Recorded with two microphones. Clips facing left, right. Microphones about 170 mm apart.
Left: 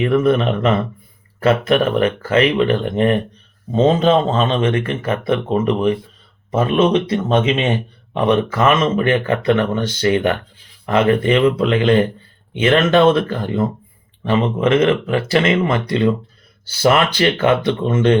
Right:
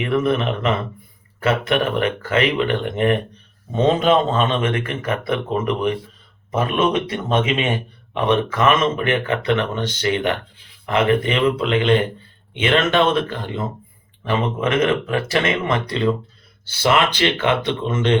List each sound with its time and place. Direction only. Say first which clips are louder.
0.0 s a man's voice: left 4 dB; 35° left (ahead or behind)
17.8 s speech: left 4 dB; 45° left (ahead or behind)